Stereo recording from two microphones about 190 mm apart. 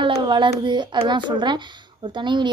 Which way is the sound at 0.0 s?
25° right (ahead or behind).